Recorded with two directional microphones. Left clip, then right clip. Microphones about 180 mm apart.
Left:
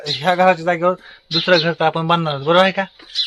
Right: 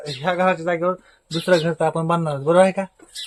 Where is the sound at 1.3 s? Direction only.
5° left (ahead or behind).